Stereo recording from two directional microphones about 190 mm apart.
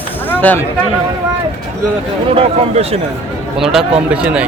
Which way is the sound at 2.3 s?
30° right (ahead or behind).